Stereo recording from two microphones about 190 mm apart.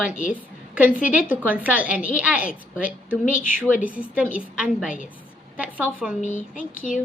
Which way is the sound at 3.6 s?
10° right (ahead or behind).